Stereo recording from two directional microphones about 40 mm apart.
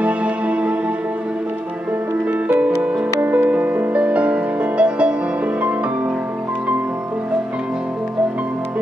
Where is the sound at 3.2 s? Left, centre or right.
Right.